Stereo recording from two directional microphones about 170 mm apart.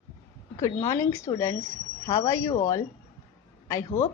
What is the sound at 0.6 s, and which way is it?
A woman's voice, 20° left (ahead or behind).